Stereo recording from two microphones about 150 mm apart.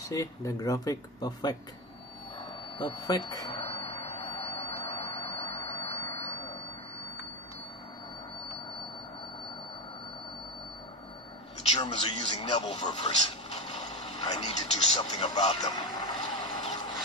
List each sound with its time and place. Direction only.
0.0 s speech: 20° left (ahead or behind)
2.8 s speech: 25° left (ahead or behind)
3.4 s a sound: 40° left (ahead or behind)
11.7 s radio: 30° left (ahead or behind)
13.5 s mechanisms: 45° left (ahead or behind)
14.2 s television: 30° left (ahead or behind)
15.0 s vehicle: 30° left (ahead or behind)